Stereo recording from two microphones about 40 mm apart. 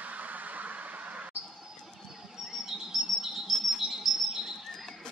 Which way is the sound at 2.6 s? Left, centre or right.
Centre.